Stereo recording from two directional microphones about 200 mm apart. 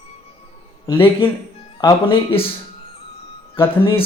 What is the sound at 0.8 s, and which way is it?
Speech, 10° left (ahead or behind).